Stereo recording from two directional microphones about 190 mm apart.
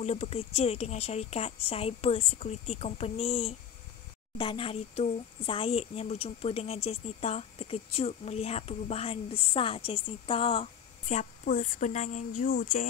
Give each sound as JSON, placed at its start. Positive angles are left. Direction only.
{"t": 0.0, "sound": "speech", "side_deg": 35}